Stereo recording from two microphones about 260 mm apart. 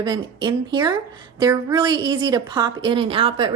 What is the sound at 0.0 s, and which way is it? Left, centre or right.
A woman's voice, centre.